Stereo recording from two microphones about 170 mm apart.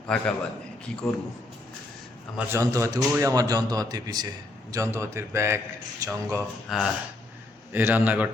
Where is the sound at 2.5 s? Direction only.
20° right (ahead or behind).